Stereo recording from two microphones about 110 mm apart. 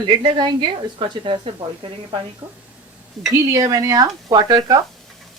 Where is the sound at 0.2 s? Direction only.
45° right (ahead or behind).